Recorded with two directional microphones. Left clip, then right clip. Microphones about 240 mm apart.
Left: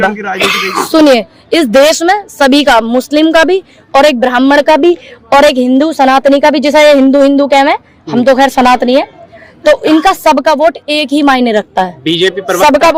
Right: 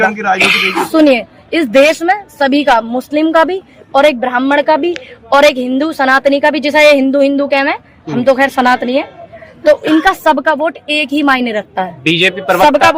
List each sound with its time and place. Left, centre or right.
0.3 s a woman's voice: left
12.0 s a man's voice: centre